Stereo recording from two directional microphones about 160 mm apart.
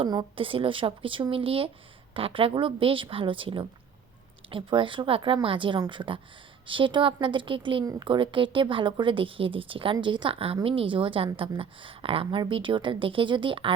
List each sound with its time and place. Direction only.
0.0 s a woman's voice: 30° right (ahead or behind)